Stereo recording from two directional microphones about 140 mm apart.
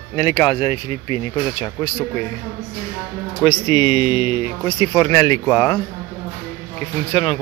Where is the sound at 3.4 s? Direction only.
30° left (ahead or behind).